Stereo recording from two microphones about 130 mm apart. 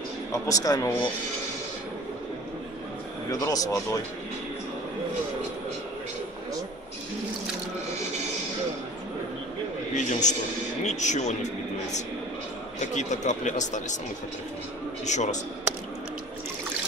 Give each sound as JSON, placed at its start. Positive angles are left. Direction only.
{"t": 0.3, "sound": "speech", "side_deg": 25}
{"t": 3.3, "sound": "speech", "side_deg": 30}
{"t": 9.9, "sound": "speech", "side_deg": 70}
{"t": 12.9, "sound": "speech", "side_deg": 70}
{"t": 15.0, "sound": "speech", "side_deg": 65}